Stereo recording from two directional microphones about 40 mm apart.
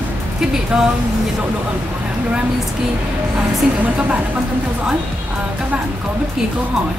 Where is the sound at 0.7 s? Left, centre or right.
Centre.